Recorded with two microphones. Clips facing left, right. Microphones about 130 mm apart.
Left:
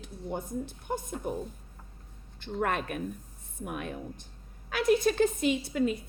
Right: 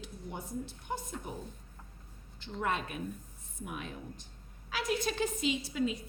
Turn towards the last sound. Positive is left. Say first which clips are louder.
# left 5 dB
turn(degrees=50)  # may be behind; listen again after turning